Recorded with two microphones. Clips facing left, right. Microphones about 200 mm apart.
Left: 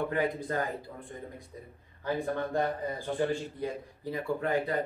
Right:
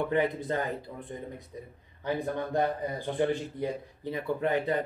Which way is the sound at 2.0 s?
20° right (ahead or behind).